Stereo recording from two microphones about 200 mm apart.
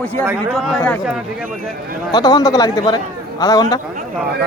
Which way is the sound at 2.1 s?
20° left (ahead or behind).